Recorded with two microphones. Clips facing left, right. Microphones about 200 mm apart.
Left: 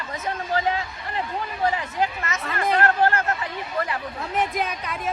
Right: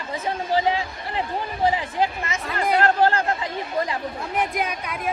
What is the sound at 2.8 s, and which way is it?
Speech, 30° right (ahead or behind).